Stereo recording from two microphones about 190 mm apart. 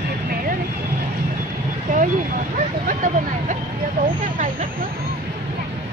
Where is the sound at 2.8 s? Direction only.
40° right (ahead or behind).